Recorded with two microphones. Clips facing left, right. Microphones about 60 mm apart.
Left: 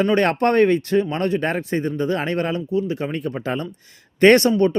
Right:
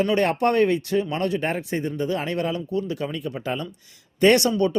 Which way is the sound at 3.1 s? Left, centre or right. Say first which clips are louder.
Left 3 dB; left.